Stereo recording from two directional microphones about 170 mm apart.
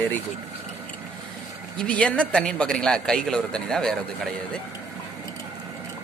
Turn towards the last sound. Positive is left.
turn(degrees=5)  # may be behind; listen again after turning